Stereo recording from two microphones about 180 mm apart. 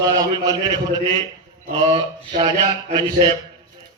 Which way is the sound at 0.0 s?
20° right (ahead or behind).